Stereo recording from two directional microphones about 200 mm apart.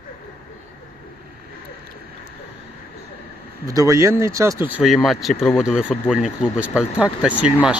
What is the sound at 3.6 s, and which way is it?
Speech, 15° right (ahead or behind).